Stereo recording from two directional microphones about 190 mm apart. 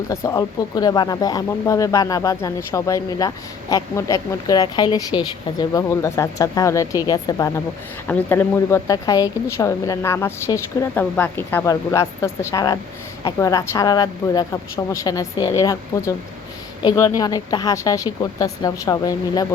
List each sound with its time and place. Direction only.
0.1 s speech: 15° left (ahead or behind)